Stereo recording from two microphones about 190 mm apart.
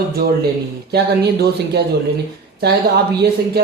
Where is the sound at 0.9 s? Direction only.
60° right (ahead or behind).